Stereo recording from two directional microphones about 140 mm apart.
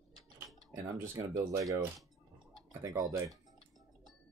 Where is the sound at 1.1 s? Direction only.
25° right (ahead or behind).